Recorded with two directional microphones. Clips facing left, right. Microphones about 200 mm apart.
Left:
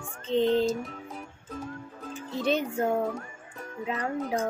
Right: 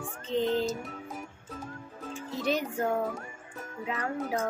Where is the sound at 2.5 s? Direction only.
25° left (ahead or behind).